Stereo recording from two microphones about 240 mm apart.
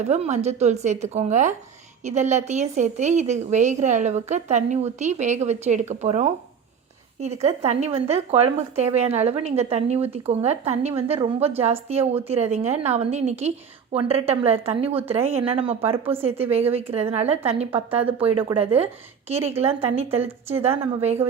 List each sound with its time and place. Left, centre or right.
0.0 s a woman's voice: right
20.1 s a woman's voice: centre